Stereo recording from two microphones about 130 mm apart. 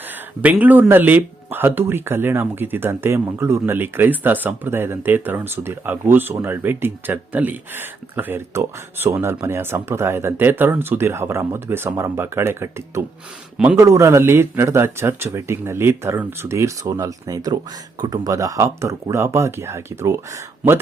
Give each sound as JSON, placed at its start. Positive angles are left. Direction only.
{"t": 0.4, "sound": "speech", "side_deg": -15}